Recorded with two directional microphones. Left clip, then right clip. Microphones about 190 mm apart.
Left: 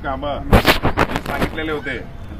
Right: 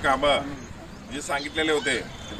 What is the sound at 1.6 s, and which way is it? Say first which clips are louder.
Speech: even; 20° right (ahead or behind).